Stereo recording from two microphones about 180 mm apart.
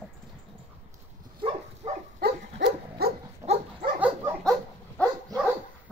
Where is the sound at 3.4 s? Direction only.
35° right (ahead or behind).